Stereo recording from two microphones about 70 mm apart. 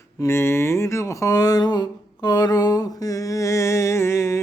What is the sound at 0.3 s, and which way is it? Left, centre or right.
Speech, left.